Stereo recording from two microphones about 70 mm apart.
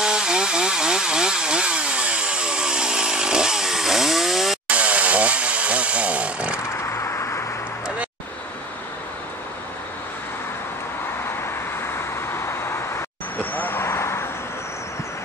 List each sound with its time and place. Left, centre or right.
0.0 s chainsaw: centre
4.6 s chainsaw: centre
7.0 s vehicle: left
11.8 s vehicle: left
13.4 s vehicle: left